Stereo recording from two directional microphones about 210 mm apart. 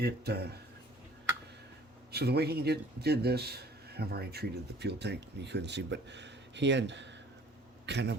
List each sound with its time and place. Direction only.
0.0 s speech: 50° right (ahead or behind)
2.1 s speech: 50° right (ahead or behind)